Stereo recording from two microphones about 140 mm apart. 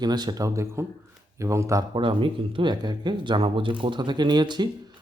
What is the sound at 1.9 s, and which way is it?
Speech, 35° right (ahead or behind).